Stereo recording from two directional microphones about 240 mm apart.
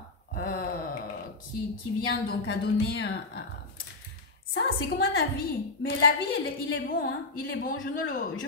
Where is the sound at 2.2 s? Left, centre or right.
Left.